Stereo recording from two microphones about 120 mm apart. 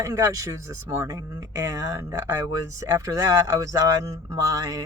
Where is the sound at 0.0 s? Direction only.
25° right (ahead or behind).